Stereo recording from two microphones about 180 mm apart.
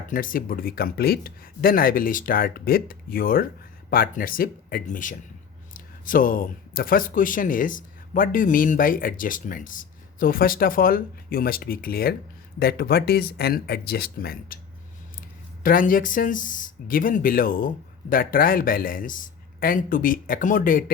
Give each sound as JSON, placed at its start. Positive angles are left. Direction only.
{"t": 0.1, "sound": "speech", "side_deg": 50}
{"t": 15.6, "sound": "speech", "side_deg": 50}